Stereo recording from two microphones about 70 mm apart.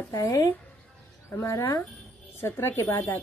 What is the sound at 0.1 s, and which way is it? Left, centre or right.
Speech, left.